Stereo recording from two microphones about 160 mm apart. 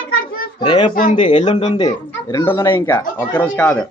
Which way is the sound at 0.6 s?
30° left (ahead or behind).